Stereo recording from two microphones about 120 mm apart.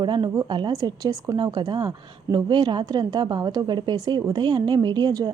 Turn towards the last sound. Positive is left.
turn(degrees=-35)  # may be behind; listen again after turning